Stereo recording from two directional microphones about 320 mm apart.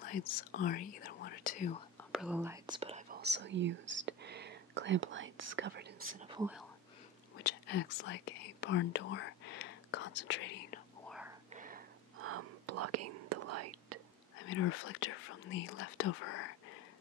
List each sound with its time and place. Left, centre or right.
0.0 s speech: left
2.0 s speech: centre; by 6.1 s right
6.1 s speech: centre
7.4 s speech: left
11.1 s whispering: centre
11.5 s whispering: right
12.2 s whispering: right
14.5 s speech: left